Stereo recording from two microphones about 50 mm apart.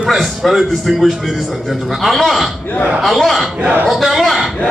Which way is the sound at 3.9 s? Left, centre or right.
Centre.